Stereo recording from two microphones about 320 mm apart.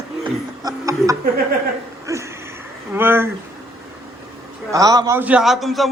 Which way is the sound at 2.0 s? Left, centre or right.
Centre.